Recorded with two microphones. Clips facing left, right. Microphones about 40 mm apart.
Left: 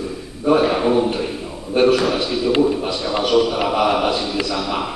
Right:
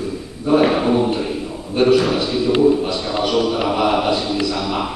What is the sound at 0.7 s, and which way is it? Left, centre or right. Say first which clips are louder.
Speech: even; centre.